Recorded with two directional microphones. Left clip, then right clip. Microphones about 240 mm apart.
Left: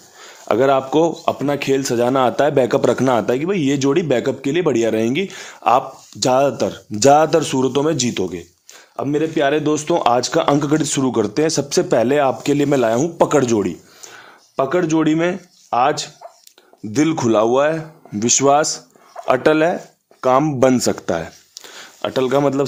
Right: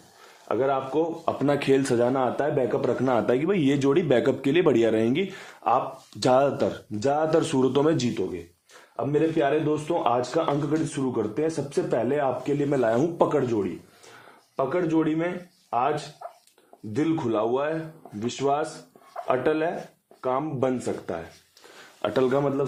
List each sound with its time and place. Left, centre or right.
0.4 s speech: left
1.4 s speech: centre
2.0 s a man's voice: left
5.6 s a man's voice: left
6.1 s a man's voice: centre
7.1 s a man's voice: left
7.3 s a man's voice: centre
9.0 s a man's voice: left
16.9 s a man's voice: left
22.0 s a man's voice: left